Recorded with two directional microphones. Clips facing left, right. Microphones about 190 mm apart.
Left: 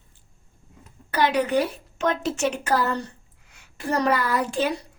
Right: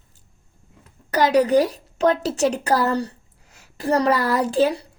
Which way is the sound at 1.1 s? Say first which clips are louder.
Right 5 dB; 40° right (ahead or behind).